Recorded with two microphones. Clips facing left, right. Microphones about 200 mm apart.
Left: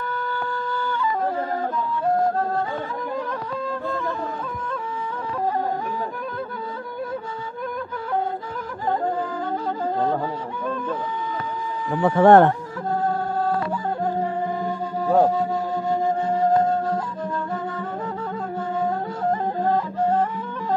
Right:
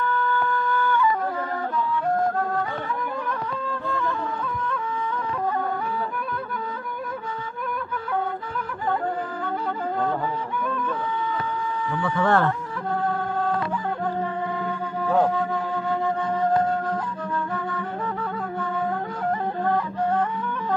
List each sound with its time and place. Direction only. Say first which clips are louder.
3.6 s music: left 3 dB; 40° left (ahead or behind)
11.9 s speech: left 9 dB; 40° left (ahead or behind)
13.0 s a sound: left 2 dB; 40° left (ahead or behind)
14.0 s music: left 5 dB; 40° left (ahead or behind)
17.5 s music: left 1 dB; 45° left (ahead or behind)
19.6 s music: left 2 dB; 45° left (ahead or behind)